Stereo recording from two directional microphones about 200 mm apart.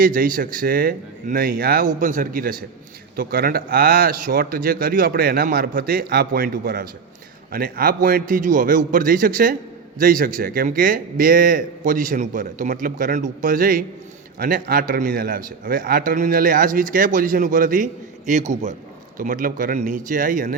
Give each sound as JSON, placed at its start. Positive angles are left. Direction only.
{"t": 0.0, "sound": "a man's voice", "side_deg": -45}